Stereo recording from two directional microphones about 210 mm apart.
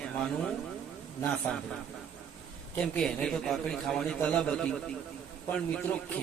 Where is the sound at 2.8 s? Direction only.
5° left (ahead or behind).